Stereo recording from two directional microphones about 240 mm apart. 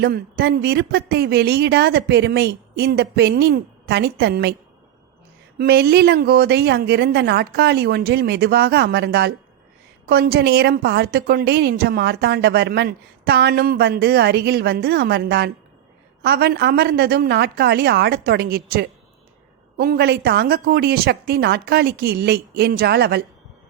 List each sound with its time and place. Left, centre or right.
0.0 s speech: right
5.5 s a woman's voice: right